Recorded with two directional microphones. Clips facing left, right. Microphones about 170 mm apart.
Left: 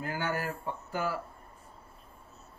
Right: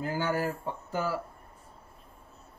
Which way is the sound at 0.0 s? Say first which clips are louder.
Right 4 dB; 25° right (ahead or behind).